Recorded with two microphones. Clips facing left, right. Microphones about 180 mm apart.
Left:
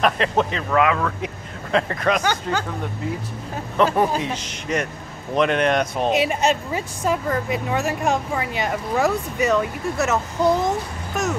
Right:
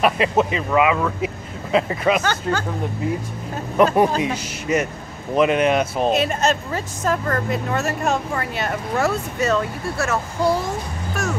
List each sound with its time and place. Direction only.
0.0 s speech: 5° right (ahead or behind)
3.7 s speech: 10° right (ahead or behind)
6.1 s speech: 15° left (ahead or behind)